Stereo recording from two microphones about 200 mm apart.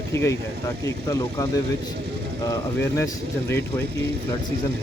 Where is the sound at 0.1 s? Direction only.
15° left (ahead or behind).